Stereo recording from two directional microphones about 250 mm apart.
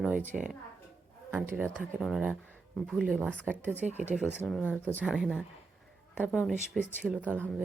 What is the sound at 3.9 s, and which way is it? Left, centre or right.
Speech, right.